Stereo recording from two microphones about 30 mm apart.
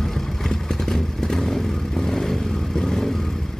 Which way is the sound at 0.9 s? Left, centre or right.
Centre.